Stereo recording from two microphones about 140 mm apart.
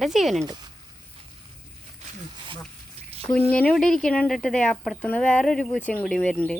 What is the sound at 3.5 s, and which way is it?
Speech, 5° left (ahead or behind).